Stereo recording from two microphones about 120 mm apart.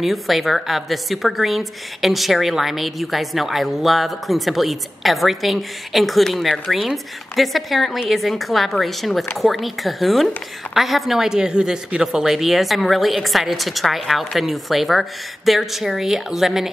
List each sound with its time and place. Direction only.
0.0 s a woman's voice: centre (ahead or behind)